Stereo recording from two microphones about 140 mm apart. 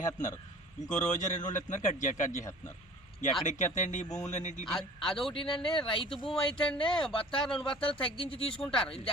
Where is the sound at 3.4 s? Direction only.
60° left (ahead or behind).